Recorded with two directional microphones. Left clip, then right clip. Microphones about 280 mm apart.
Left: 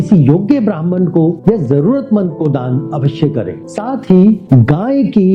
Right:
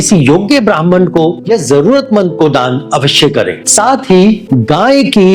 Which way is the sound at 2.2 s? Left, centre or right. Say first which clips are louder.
Right 8 dB; centre.